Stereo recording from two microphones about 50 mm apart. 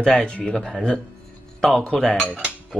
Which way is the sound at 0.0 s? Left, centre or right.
Centre.